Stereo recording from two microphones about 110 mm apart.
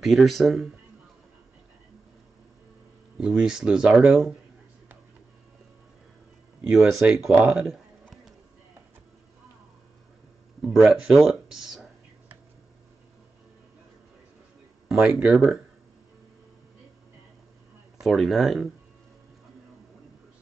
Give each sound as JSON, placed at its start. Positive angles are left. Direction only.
{"t": 0.0, "sound": "speech", "side_deg": 0}
{"t": 3.2, "sound": "speech", "side_deg": -10}
{"t": 6.7, "sound": "speech", "side_deg": -5}
{"t": 7.3, "sound": "speech", "side_deg": -15}
{"t": 8.0, "sound": "a sound", "side_deg": 0}
{"t": 10.6, "sound": "speech", "side_deg": -5}
{"t": 14.9, "sound": "speech", "side_deg": -15}
{"t": 17.9, "sound": "speech", "side_deg": 0}